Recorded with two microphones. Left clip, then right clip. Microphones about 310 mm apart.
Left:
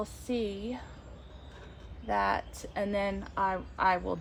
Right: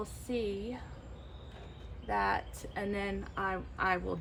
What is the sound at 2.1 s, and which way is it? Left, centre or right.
Speech, left.